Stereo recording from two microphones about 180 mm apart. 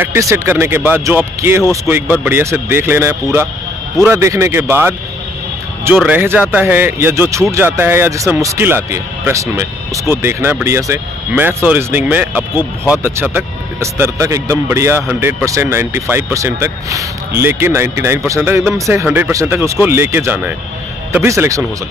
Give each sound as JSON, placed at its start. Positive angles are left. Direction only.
{"t": 0.0, "sound": "speech", "side_deg": -15}
{"t": 5.9, "sound": "speech", "side_deg": -10}